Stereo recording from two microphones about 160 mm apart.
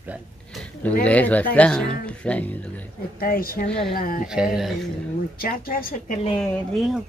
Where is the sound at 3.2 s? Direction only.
65° left (ahead or behind).